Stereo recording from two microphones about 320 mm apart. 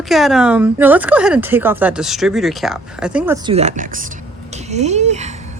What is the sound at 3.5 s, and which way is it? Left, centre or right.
Speech, right.